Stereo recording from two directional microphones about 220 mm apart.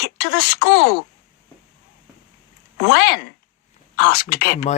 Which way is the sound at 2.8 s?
45° left (ahead or behind).